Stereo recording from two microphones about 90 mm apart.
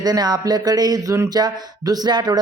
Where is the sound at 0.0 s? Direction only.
50° right (ahead or behind).